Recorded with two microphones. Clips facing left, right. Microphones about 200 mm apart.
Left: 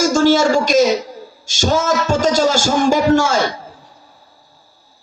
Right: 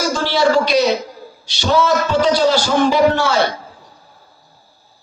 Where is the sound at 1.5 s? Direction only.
45° left (ahead or behind).